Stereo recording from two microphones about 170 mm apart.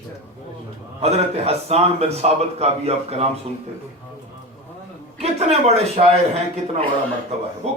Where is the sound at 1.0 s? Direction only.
35° right (ahead or behind).